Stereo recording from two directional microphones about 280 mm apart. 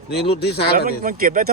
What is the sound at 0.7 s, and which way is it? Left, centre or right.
Speech, right.